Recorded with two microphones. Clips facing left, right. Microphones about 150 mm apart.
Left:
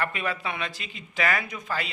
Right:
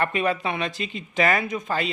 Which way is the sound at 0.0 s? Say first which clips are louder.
Right 6 dB; 20° right (ahead or behind).